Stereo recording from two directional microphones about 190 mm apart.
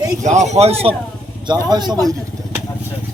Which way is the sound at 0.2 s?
40° right (ahead or behind).